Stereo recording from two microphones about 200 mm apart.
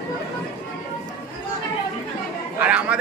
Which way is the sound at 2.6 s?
5° right (ahead or behind).